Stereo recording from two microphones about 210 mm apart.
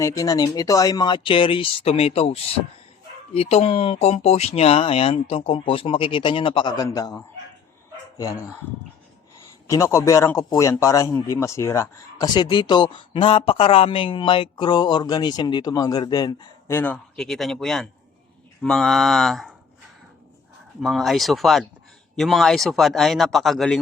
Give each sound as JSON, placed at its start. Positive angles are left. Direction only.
{"t": 0.0, "sound": "a man's voice", "side_deg": 15}
{"t": 9.6, "sound": "a man's voice", "side_deg": 15}
{"t": 20.8, "sound": "a man's voice", "side_deg": 0}